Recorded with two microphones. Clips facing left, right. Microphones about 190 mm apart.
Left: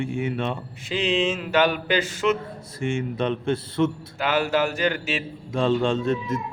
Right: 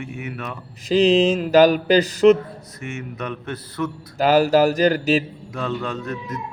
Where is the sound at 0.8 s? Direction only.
40° right (ahead or behind).